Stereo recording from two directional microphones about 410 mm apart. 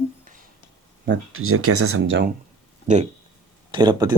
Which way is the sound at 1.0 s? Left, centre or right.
Right.